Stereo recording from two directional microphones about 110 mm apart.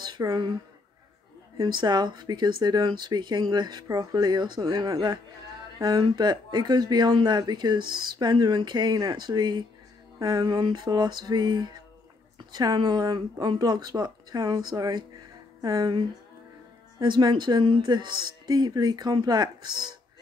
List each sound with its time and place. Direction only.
0.0 s speech: 40° right (ahead or behind)
1.6 s speech: 40° right (ahead or behind)